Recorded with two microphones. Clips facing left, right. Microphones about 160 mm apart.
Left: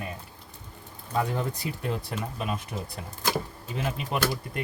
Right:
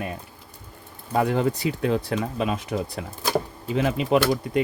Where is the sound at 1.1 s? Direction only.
75° right (ahead or behind).